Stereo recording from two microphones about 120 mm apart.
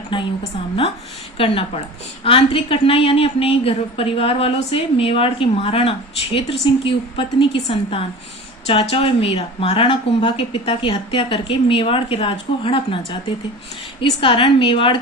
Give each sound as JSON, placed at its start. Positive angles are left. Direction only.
{"t": 0.1, "sound": "a woman's voice", "side_deg": 45}
{"t": 1.4, "sound": "a woman's voice", "side_deg": 50}